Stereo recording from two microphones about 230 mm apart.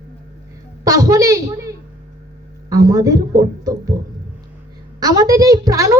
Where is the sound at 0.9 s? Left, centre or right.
Centre.